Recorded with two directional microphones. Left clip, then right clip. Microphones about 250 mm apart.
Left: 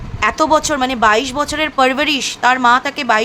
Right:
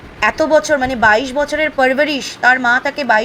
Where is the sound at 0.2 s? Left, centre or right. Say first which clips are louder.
Right 1 dB; centre.